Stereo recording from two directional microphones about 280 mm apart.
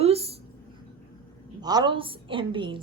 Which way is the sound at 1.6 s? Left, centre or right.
Centre.